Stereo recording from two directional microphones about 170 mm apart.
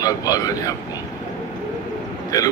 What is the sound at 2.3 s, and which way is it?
Speech, 20° left (ahead or behind).